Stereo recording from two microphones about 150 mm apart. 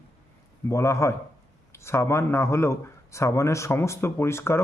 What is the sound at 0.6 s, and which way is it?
A man's voice, 20° left (ahead or behind).